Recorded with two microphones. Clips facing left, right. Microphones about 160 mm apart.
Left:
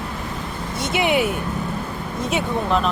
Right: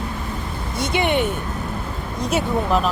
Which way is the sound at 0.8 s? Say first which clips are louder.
Even; centre (ahead or behind).